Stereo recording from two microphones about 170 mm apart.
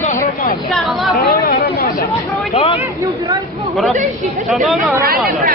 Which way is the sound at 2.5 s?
35° left (ahead or behind).